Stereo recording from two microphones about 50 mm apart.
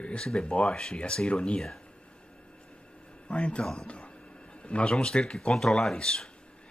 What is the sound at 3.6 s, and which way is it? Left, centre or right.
Speech, centre.